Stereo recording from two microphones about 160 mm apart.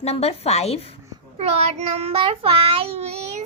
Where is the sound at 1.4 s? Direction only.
40° right (ahead or behind).